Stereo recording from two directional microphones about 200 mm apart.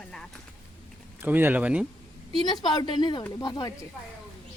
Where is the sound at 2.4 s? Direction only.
20° left (ahead or behind).